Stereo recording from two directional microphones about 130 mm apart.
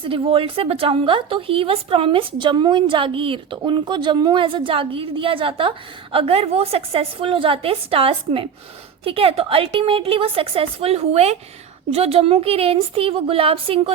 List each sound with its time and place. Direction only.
0.0 s speech: 45° right (ahead or behind)